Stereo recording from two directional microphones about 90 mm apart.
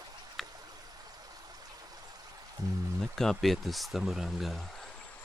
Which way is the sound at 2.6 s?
40° right (ahead or behind).